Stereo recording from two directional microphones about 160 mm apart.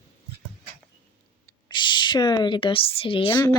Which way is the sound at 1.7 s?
30° left (ahead or behind).